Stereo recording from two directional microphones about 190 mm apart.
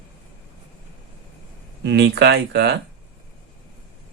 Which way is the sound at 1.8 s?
65° right (ahead or behind).